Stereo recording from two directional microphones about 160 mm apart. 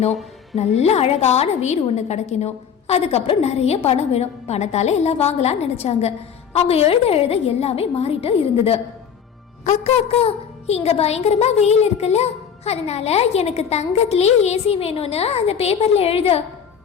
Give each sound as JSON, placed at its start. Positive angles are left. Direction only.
{"t": 0.5, "sound": "a woman's voice", "side_deg": 40}
{"t": 9.6, "sound": "a woman's voice", "side_deg": 40}